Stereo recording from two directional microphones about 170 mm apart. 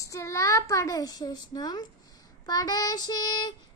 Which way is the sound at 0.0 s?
20° left (ahead or behind).